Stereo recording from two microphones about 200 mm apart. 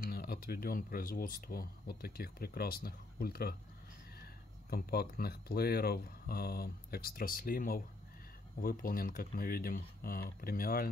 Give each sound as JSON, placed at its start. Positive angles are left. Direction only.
{"t": 0.0, "sound": "speech", "side_deg": 50}